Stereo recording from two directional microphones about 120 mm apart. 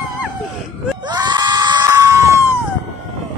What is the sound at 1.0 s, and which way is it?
Screaming, 40° right (ahead or behind).